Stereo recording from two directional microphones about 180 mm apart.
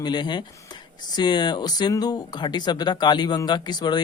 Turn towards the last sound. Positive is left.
turn(degrees=25)  # may be behind; listen again after turning